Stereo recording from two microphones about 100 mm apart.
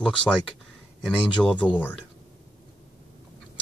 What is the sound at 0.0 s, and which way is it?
Speech, 10° left (ahead or behind).